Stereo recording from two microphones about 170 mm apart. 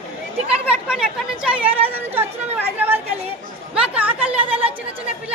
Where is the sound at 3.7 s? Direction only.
5° right (ahead or behind).